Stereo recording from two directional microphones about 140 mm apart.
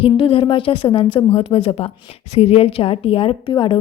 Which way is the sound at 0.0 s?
40° left (ahead or behind).